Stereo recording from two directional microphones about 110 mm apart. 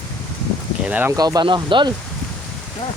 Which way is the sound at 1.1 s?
35° right (ahead or behind).